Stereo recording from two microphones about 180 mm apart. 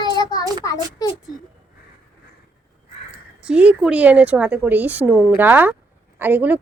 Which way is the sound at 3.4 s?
5° right (ahead or behind).